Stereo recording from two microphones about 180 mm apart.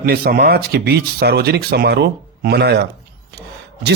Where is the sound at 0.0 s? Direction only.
55° right (ahead or behind).